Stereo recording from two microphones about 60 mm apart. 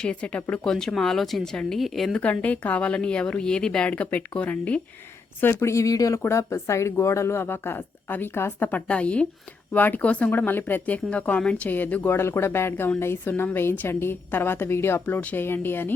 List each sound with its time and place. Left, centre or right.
0.0 s a woman's voice: centre
2.1 s a woman's voice: left
5.4 s a woman's voice: left
5.7 s speech: left
6.2 s a woman's voice: left
8.9 s a woman's voice: centre
9.7 s a woman's voice: left
10.3 s a woman's voice: left
12.0 s a woman's voice: left